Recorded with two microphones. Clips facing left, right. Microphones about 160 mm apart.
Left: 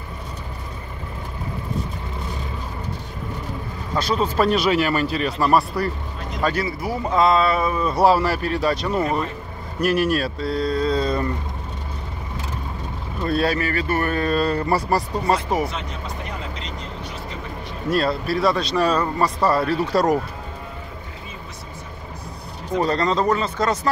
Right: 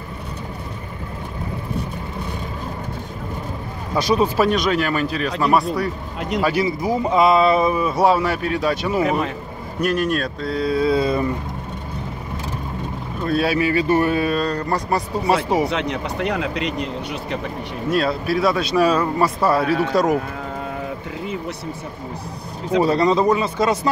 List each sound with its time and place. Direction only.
3.9 s speech: 15° right (ahead or behind)
4.5 s speech: 5° left (ahead or behind)
6.4 s speech: 15° right (ahead or behind)
7.9 s speech: centre (ahead or behind)
13.2 s speech: centre (ahead or behind)
14.3 s speech: 5° left (ahead or behind)
15.7 s speech: 75° right (ahead or behind)
17.8 s speech: centre (ahead or behind)
22.8 s speech: 10° right (ahead or behind)